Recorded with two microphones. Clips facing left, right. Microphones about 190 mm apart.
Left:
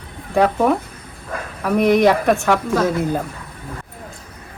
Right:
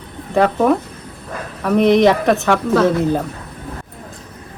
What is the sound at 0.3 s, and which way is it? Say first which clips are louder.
A woman's voice: right 2 dB; centre (ahead or behind).